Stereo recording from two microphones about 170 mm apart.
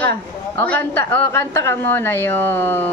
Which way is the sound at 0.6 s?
10° left (ahead or behind).